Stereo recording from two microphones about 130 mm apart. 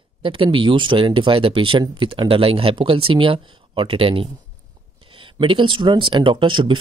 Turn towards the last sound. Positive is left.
turn(degrees=-40)  # may be behind; listen again after turning